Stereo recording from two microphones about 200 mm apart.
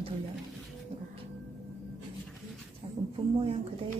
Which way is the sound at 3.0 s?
25° right (ahead or behind).